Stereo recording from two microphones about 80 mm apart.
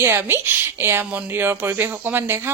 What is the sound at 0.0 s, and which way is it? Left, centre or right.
Speech, right.